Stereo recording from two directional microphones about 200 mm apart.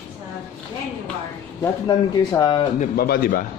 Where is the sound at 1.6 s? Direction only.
20° left (ahead or behind).